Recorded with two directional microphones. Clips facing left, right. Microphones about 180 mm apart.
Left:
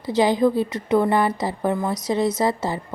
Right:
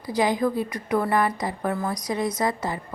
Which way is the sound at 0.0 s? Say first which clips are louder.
Left 5 dB; 25° left (ahead or behind).